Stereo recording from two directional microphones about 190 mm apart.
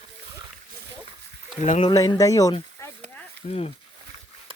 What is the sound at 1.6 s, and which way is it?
Speech, 35° left (ahead or behind).